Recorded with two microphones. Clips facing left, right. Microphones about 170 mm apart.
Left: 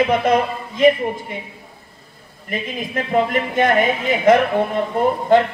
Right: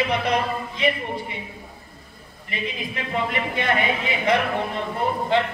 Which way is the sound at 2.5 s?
45° left (ahead or behind).